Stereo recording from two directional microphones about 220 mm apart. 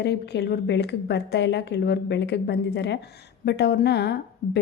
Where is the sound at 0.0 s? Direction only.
50° left (ahead or behind).